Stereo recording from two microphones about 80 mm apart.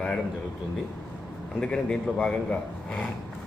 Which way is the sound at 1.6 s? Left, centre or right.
Centre.